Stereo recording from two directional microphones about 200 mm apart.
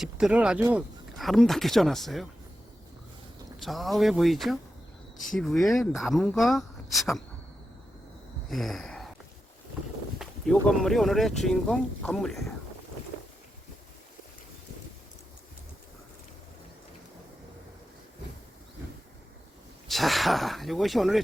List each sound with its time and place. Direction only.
0.0 s speech: 5° right (ahead or behind)
3.6 s speech: centre (ahead or behind)
8.4 s a sound: centre (ahead or behind)
10.2 s speech: centre (ahead or behind)
19.9 s speech: centre (ahead or behind)